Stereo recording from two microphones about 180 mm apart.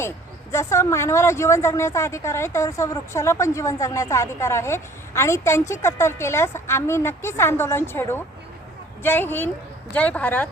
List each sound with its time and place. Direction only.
0.5 s a woman's voice: 15° left (ahead or behind)